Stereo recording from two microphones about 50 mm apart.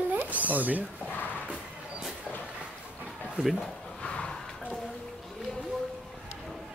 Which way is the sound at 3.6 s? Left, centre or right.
Centre.